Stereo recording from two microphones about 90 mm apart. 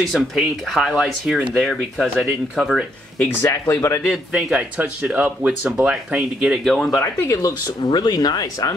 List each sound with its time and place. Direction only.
0.0 s speech: centre (ahead or behind)
3.3 s speech: 30° left (ahead or behind)
4.4 s speech: 15° right (ahead or behind); by 7.0 s 5° left (ahead or behind)
7.0 s speech: 35° left (ahead or behind)
7.8 s speech: 55° left (ahead or behind)